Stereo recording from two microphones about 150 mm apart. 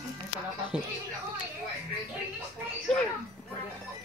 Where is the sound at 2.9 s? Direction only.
5° left (ahead or behind).